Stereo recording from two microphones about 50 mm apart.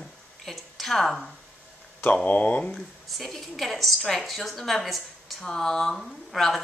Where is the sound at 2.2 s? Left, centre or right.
Left.